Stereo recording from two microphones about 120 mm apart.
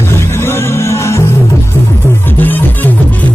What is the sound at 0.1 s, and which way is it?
Music, 20° left (ahead or behind).